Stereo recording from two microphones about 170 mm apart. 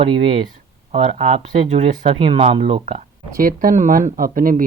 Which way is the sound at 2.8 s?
45° right (ahead or behind).